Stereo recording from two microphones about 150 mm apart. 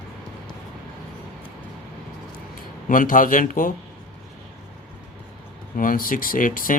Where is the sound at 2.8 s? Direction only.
65° left (ahead or behind).